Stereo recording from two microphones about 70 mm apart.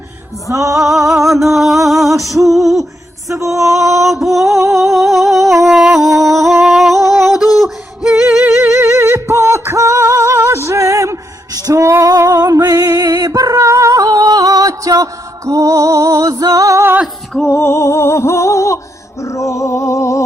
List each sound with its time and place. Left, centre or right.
0.4 s music: right
0.8 s a sound: centre
1.3 s music: centre
3.3 s music: right
4.0 s music: centre
4.4 s a sound: right
4.8 s a sound: centre
5.6 s music: centre
8.6 s singing: right
11.7 s music: right
17.5 s music: left
19.2 s a sound: left